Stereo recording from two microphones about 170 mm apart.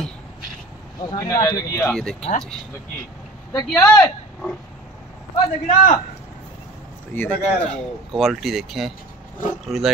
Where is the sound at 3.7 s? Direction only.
10° left (ahead or behind).